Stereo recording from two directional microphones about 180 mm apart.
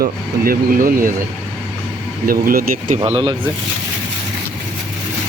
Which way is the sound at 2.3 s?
55° right (ahead or behind).